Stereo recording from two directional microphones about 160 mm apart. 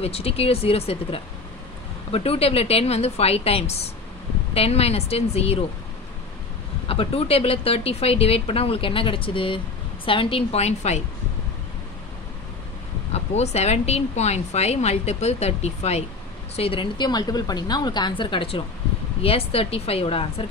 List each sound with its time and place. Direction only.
0.0 s speech: 40° left (ahead or behind)
6.9 s speech: 35° left (ahead or behind)
13.1 s a woman's voice: 45° left (ahead or behind)